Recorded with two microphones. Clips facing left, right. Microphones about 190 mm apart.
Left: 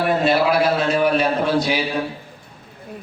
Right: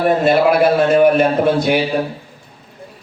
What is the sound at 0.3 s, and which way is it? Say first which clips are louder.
A man's voice: right 5 dB; 55° right (ahead or behind).